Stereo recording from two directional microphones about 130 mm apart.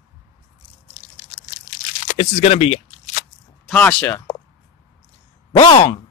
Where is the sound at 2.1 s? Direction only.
55° left (ahead or behind).